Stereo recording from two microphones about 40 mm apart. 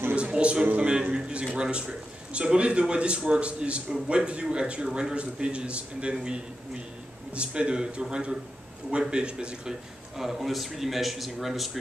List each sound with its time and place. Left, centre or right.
0.1 s music: right
1.1 s a man's voice: right
4.8 s speech: centre
5.1 s a man's voice: right
10.1 s speech: centre